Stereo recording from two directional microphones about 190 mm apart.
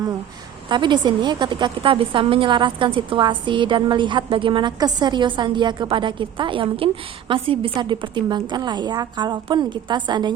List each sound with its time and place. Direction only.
0.7 s a woman's voice: 25° right (ahead or behind)